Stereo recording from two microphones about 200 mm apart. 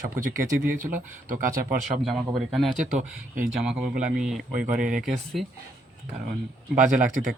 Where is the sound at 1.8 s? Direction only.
Centre (ahead or behind).